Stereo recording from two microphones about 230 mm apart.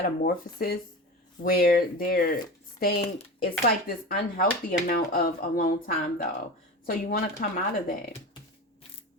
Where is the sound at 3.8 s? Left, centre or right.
Left.